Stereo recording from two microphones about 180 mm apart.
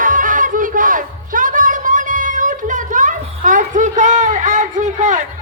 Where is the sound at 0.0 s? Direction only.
45° right (ahead or behind).